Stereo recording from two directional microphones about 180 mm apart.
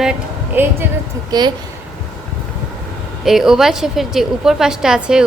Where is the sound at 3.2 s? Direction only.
Centre (ahead or behind).